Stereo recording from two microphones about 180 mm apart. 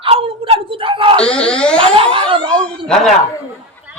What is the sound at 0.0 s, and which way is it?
Wail, 30° right (ahead or behind).